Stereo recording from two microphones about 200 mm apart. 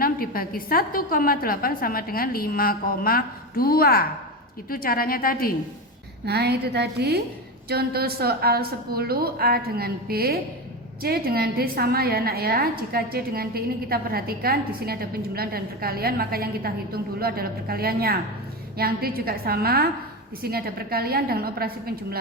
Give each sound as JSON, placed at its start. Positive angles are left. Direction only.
{"t": 0.0, "sound": "a woman's voice", "side_deg": 45}
{"t": 6.2, "sound": "a woman's voice", "side_deg": -55}